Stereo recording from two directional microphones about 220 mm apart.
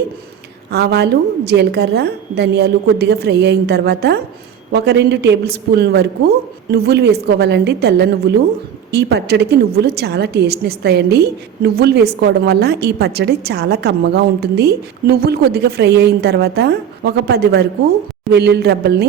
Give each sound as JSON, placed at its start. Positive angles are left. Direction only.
{"t": 0.7, "sound": "a woman's voice", "side_deg": -45}